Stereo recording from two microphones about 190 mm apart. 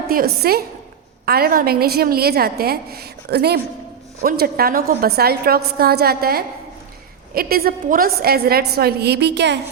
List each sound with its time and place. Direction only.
0.1 s a woman's voice: 50° right (ahead or behind)